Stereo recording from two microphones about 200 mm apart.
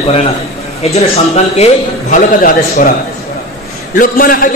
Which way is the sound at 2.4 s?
45° left (ahead or behind).